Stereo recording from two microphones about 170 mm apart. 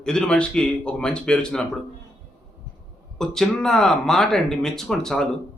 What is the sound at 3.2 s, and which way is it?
A man's voice, centre (ahead or behind).